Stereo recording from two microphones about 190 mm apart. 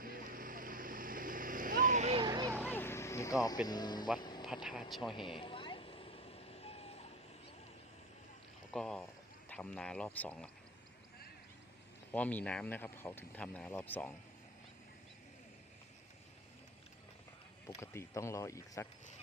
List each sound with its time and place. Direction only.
0.0 s vehicle: 50° right (ahead or behind)
2.2 s vehicle: 20° right (ahead or behind)
2.6 s a sound: 10° left (ahead or behind)
4.4 s speech: centre (ahead or behind)
5.1 s vehicle: 25° left (ahead or behind)
8.7 s speech: 5° left (ahead or behind)
12.1 s speech: 10° left (ahead or behind)
17.7 s speech: 15° left (ahead or behind)